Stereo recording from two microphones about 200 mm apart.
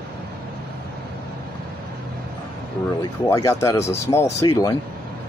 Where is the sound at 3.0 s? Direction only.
15° left (ahead or behind).